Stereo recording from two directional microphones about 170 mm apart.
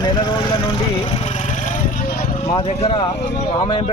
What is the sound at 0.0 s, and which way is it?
Vehicle, 25° left (ahead or behind).